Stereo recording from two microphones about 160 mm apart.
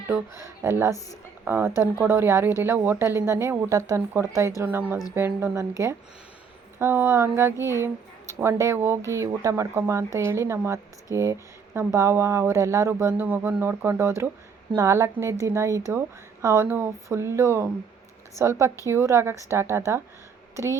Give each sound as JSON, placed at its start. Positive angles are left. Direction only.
{"t": 0.1, "sound": "speech", "side_deg": -15}
{"t": 6.7, "sound": "speech", "side_deg": -15}